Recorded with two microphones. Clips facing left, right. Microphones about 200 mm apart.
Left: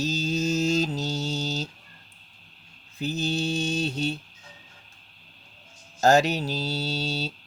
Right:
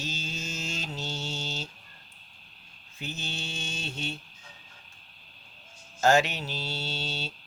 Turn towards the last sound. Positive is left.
turn(degrees=40)  # may be behind; listen again after turning